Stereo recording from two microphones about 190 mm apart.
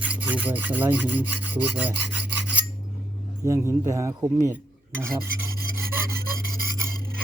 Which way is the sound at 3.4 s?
15° right (ahead or behind).